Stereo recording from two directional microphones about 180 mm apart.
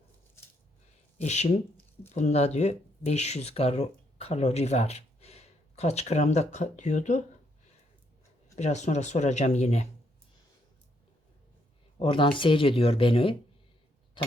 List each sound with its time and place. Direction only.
1.2 s speech: 40° left (ahead or behind)
8.5 s speech: 40° left (ahead or behind)
11.9 s speech: 30° left (ahead or behind)
14.2 s a sound: 30° left (ahead or behind)